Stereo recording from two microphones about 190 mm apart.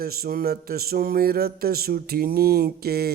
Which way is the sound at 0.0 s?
55° right (ahead or behind).